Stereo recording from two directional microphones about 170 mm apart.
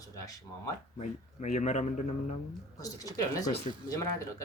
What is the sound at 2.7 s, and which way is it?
Speech, 20° left (ahead or behind).